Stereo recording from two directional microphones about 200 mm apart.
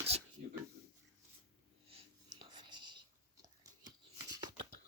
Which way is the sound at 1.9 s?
25° right (ahead or behind).